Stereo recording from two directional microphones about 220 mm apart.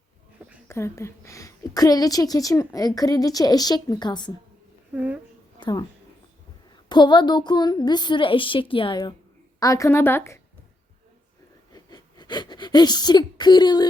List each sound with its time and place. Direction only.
0.7 s a woman's voice: 10° left (ahead or behind)
4.9 s a woman's voice: 5° right (ahead or behind)
5.5 s a sound: 20° left (ahead or behind)
6.8 s a woman's voice: 20° left (ahead or behind)
11.7 s speech: 20° left (ahead or behind)